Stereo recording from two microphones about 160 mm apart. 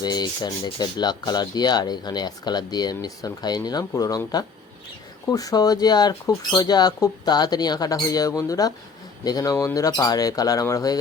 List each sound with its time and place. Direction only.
0.0 s speech: 25° left (ahead or behind)